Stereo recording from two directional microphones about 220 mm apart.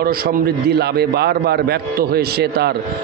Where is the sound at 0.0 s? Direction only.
45° right (ahead or behind).